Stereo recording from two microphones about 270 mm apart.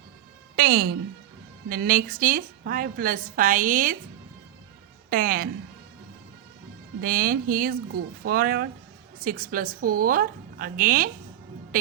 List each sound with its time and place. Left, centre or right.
0.5 s a woman's voice: right
5.0 s a woman's voice: right
7.0 s a woman's voice: right